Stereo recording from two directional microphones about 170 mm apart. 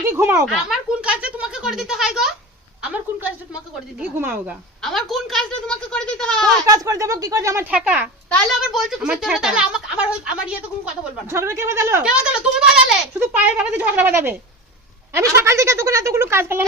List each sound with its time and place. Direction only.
0.1 s speech: 15° right (ahead or behind)
0.4 s speech: 5° right (ahead or behind)
4.8 s speech: centre (ahead or behind)
6.7 s speech: 20° right (ahead or behind)
11.3 s speech: 15° right (ahead or behind)
12.0 s speech: 5° right (ahead or behind)